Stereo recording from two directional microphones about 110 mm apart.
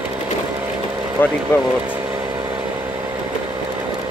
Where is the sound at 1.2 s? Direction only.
20° left (ahead or behind).